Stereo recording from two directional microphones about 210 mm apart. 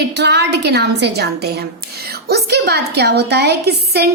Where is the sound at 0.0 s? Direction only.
55° right (ahead or behind).